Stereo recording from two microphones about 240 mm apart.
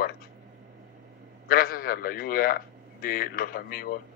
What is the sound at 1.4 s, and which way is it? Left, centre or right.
Speech, left.